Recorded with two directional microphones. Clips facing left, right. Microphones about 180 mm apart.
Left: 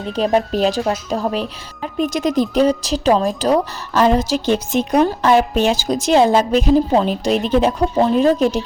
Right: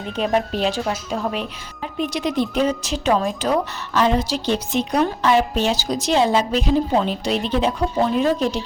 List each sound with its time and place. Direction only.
0.2 s a woman's voice: 40° left (ahead or behind)